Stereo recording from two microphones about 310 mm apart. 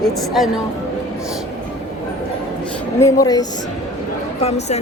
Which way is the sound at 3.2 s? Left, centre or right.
Centre.